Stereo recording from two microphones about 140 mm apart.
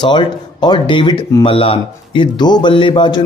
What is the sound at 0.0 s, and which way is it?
A man's voice, 35° left (ahead or behind).